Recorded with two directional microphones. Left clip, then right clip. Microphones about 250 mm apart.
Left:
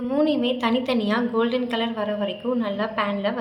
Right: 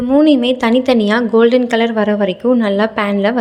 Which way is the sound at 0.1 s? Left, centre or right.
Right.